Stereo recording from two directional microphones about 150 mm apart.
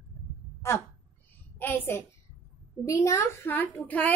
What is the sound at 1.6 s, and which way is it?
A woman's voice, 15° left (ahead or behind).